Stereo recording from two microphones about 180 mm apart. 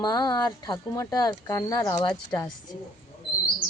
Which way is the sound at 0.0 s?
25° left (ahead or behind).